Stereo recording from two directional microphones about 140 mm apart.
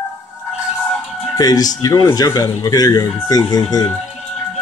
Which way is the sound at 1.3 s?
25° left (ahead or behind).